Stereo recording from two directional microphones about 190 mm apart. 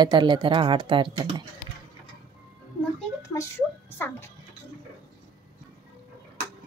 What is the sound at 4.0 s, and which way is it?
Speech, 10° left (ahead or behind).